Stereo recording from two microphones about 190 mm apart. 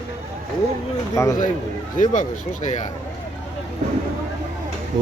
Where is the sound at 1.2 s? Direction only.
15° left (ahead or behind).